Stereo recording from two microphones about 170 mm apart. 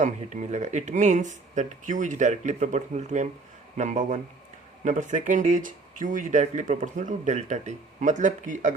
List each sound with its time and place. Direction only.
0.0 s speech: 45° right (ahead or behind)